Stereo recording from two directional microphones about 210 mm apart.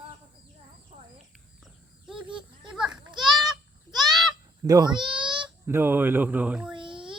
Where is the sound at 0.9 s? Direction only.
30° right (ahead or behind).